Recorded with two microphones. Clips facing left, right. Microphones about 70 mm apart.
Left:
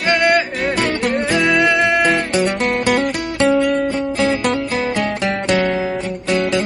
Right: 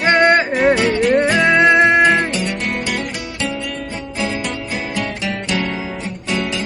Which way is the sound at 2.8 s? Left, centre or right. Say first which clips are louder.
Left 6 dB; left.